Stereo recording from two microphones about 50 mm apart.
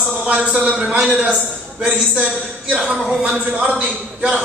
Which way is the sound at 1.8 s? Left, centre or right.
Right.